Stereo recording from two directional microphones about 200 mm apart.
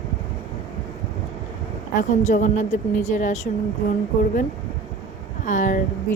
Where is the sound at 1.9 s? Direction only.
40° left (ahead or behind).